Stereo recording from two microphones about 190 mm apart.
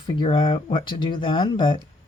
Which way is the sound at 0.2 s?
25° left (ahead or behind).